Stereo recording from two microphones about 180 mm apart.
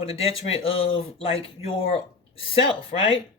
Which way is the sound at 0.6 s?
30° left (ahead or behind).